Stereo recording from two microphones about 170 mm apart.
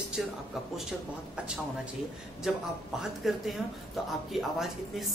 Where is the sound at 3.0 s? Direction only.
Centre (ahead or behind).